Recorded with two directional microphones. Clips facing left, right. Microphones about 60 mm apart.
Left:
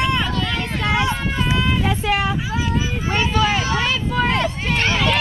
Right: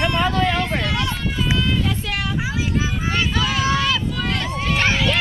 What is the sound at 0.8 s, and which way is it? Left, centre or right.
Run, left.